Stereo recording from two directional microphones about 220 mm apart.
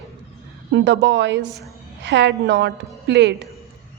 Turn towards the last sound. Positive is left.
turn(degrees=-50)  # may be behind; listen again after turning